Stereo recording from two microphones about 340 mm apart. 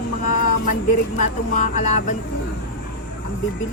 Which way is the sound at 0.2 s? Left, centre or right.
Left.